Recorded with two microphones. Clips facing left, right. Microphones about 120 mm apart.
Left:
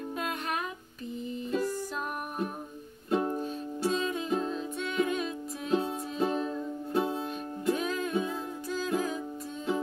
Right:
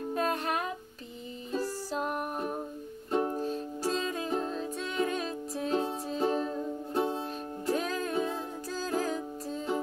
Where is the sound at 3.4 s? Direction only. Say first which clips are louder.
Even; 40° right (ahead or behind).